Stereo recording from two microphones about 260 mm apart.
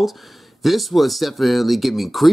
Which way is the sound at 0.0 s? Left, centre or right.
Centre.